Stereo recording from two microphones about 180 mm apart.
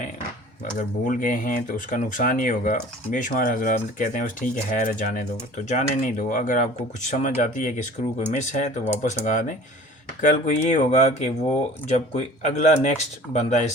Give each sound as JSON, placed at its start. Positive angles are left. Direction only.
{"t": 0.8, "sound": "speech", "side_deg": 50}